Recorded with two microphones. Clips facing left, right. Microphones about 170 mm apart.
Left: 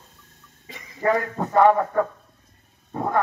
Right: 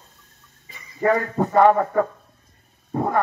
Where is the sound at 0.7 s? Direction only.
90° left.